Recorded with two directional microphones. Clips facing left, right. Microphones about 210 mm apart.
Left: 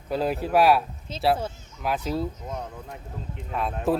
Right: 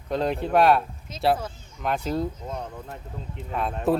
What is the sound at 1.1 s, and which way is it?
Speech, 30° left (ahead or behind).